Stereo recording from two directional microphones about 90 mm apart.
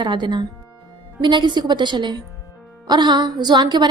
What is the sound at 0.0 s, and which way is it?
A woman's voice, 55° right (ahead or behind).